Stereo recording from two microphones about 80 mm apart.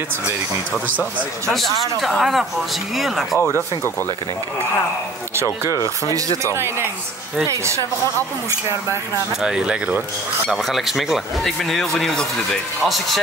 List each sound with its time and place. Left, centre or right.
1.5 s speech: centre
5.3 s speech: right
9.4 s speech: centre